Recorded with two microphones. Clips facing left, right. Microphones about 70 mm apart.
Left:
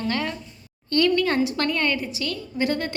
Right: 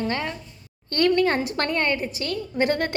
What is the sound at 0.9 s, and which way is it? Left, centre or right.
A woman's voice, right.